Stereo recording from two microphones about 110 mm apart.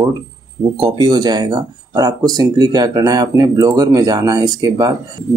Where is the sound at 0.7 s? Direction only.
40° right (ahead or behind).